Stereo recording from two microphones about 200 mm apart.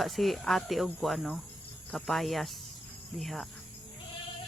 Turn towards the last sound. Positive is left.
turn(degrees=0)  # may be behind; listen again after turning